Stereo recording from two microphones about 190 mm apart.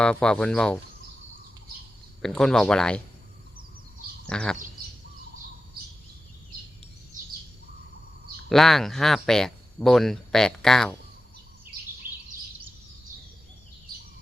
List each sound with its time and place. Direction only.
0.0 s speech: 5° left (ahead or behind)
2.2 s speech: 5° left (ahead or behind)
4.3 s speech: 5° left (ahead or behind)
8.4 s speech: centre (ahead or behind)
12.0 s a sound: 50° right (ahead or behind)